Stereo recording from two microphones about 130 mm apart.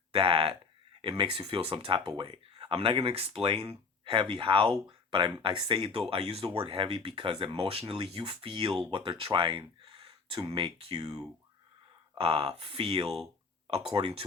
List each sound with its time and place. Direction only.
0.1 s speech: 45° right (ahead or behind)